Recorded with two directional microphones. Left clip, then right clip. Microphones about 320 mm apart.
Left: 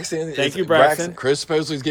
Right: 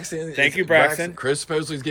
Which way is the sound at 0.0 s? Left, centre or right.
Left.